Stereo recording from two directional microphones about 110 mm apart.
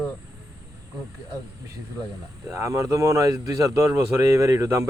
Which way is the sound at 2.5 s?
25° right (ahead or behind).